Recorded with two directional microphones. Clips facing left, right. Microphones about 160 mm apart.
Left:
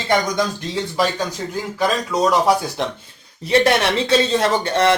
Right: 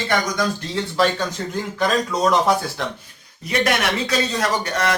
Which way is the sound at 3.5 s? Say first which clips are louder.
Left 5 dB; 30° left (ahead or behind).